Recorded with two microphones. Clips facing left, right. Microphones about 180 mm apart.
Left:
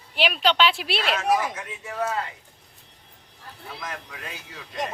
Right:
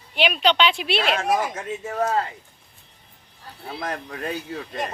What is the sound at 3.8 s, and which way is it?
Speech, 45° right (ahead or behind).